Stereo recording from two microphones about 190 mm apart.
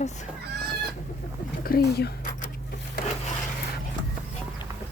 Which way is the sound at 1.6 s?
50° left (ahead or behind).